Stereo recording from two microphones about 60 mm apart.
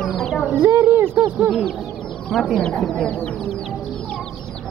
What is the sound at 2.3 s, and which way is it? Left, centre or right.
Speech, centre.